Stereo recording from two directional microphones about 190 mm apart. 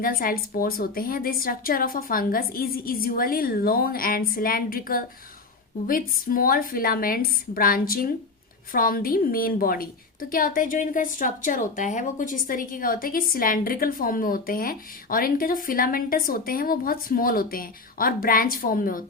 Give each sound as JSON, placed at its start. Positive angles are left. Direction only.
{"t": 0.0, "sound": "a woman's voice", "side_deg": 50}